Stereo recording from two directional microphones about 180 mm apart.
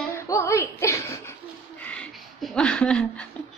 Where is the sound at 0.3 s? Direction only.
15° left (ahead or behind).